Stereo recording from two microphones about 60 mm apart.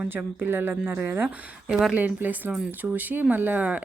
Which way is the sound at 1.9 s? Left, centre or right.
Right.